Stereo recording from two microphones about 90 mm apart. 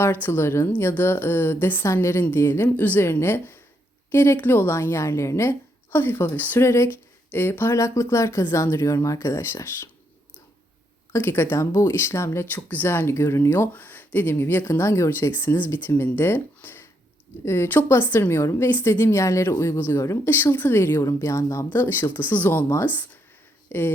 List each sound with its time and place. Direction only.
0.0 s speech: 25° left (ahead or behind)
11.1 s speech: 25° left (ahead or behind)